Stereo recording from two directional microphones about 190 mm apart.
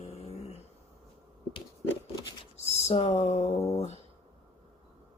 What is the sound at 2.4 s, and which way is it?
Speech, 35° left (ahead or behind).